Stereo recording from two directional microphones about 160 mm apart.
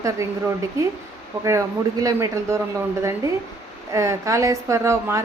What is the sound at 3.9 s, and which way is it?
A woman's voice, 20° right (ahead or behind).